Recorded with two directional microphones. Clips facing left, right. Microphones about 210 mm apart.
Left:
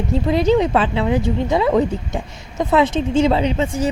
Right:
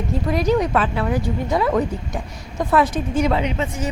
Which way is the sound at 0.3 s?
25° left (ahead or behind).